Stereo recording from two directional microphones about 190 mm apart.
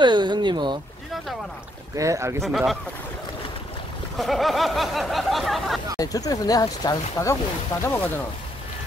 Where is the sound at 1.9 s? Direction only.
15° right (ahead or behind).